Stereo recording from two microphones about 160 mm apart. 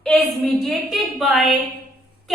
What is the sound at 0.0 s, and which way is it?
A woman's voice, centre (ahead or behind).